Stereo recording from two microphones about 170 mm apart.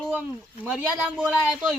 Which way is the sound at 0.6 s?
10° right (ahead or behind).